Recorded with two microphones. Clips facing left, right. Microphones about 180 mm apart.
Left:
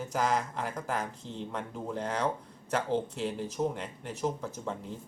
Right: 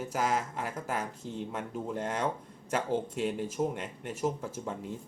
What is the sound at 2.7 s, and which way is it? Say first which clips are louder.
Speech: left 1 dB; 10° right (ahead or behind).